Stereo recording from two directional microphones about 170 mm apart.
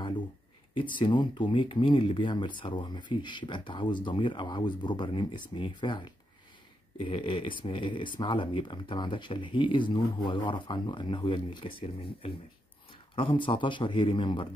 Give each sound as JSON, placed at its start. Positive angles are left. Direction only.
{"t": 0.9, "sound": "speech", "side_deg": 30}